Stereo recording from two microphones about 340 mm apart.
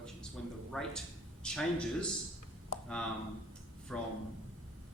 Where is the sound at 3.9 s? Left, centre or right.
Centre.